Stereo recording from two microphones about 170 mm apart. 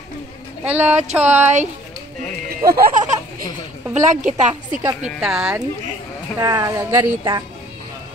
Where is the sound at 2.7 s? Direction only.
55° right (ahead or behind).